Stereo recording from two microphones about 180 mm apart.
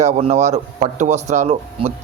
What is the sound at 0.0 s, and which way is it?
Speech, 40° right (ahead or behind).